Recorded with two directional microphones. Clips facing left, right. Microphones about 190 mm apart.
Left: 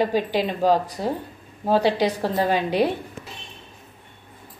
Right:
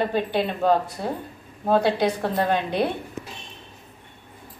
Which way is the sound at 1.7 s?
5° left (ahead or behind).